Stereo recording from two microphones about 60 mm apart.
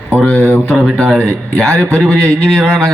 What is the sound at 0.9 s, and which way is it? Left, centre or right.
Speech, centre.